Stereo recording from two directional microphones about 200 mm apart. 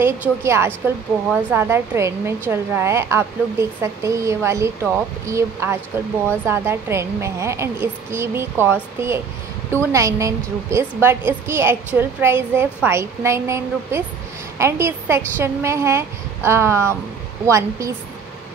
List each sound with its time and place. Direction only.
0.0 s a woman's voice: 10° right (ahead or behind)